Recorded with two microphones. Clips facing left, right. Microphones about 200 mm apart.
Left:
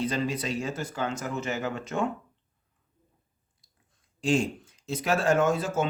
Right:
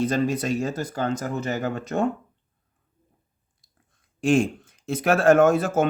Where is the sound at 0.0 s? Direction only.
45° right (ahead or behind).